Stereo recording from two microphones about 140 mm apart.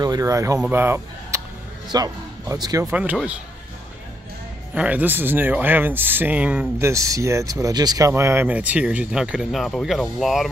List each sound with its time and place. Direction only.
0.0 s speech: 25° right (ahead or behind)
2.9 s speech: 10° right (ahead or behind)
4.7 s speech: 10° right (ahead or behind)
6.8 s speech: 20° right (ahead or behind)
8.1 s speech: 15° right (ahead or behind); by 10.5 s centre (ahead or behind)